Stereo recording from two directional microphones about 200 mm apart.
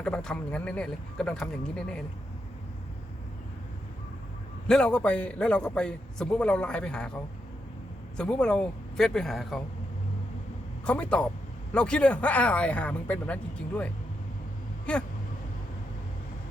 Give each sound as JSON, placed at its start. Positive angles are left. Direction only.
{"t": 0.0, "sound": "a man's voice", "side_deg": 5}
{"t": 4.7, "sound": "a man's voice", "side_deg": 5}
{"t": 10.8, "sound": "a man's voice", "side_deg": 5}